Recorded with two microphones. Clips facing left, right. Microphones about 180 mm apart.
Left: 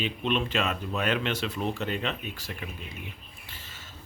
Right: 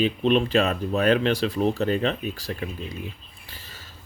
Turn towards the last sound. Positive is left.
turn(degrees=-35)  # may be behind; listen again after turning